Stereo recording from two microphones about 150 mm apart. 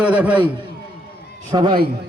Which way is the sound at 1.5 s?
25° right (ahead or behind).